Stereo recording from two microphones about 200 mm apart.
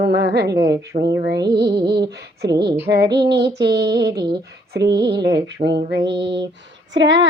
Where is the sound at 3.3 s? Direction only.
55° right (ahead or behind).